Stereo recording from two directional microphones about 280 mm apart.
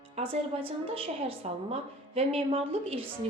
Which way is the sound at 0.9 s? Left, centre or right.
Centre.